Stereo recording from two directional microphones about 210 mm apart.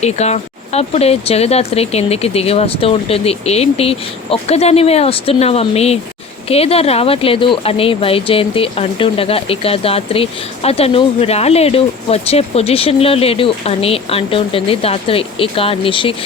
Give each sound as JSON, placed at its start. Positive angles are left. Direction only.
{"t": 0.0, "sound": "speech", "side_deg": 30}